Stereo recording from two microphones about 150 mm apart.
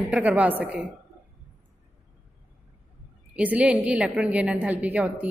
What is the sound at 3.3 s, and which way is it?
A woman's voice, 10° right (ahead or behind).